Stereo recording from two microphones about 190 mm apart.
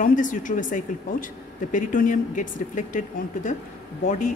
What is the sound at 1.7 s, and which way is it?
Speech, 45° left (ahead or behind).